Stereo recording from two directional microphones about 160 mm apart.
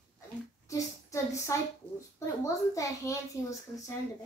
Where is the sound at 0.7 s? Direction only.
20° left (ahead or behind).